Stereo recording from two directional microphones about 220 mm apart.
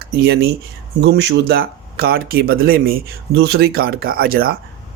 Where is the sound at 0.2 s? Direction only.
45° right (ahead or behind).